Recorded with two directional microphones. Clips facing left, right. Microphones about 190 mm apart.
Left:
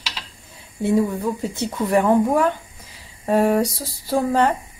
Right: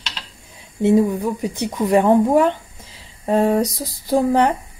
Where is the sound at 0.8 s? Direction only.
15° right (ahead or behind).